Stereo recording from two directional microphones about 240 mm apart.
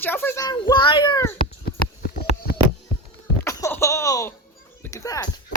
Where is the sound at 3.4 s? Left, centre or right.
Centre.